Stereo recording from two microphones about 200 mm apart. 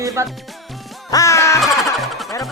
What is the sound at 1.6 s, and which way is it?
Music, centre (ahead or behind).